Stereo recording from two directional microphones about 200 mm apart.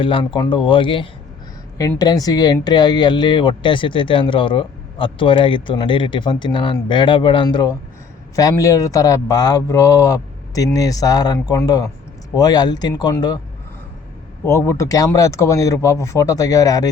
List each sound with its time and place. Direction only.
0.0 s a man's voice: 25° left (ahead or behind)
14.4 s a man's voice: 10° left (ahead or behind)